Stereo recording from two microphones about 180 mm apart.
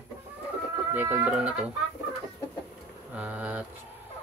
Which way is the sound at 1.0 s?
10° right (ahead or behind).